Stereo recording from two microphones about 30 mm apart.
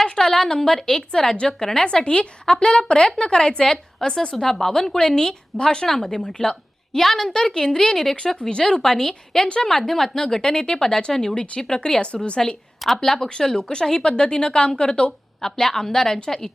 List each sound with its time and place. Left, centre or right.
0.0 s a woman's voice: centre
6.2 s speech: left
7.0 s a woman's voice: centre
8.2 s a woman's voice: centre
8.7 s a woman's voice: centre
10.2 s a woman's voice: left
11.8 s speech: left
13.0 s a woman's voice: centre
13.6 s a woman's voice: left
14.1 s a woman's voice: left
15.4 s a woman's voice: centre